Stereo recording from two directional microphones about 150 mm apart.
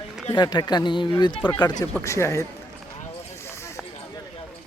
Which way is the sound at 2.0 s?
20° left (ahead or behind).